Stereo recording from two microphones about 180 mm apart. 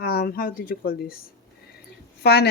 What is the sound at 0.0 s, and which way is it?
Speech, 60° left (ahead or behind).